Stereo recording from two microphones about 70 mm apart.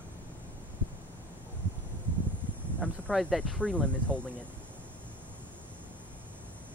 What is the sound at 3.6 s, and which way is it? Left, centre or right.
Speech, centre.